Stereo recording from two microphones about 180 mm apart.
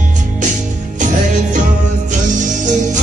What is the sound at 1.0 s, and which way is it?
Music, 45° right (ahead or behind).